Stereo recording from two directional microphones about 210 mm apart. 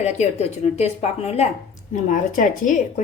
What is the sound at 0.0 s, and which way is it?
A woman's voice, 30° left (ahead or behind).